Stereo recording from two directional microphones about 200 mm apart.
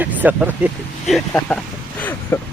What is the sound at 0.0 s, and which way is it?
Speech, 10° right (ahead or behind).